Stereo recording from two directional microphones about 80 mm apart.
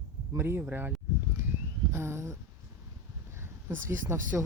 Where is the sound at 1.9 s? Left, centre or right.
Right.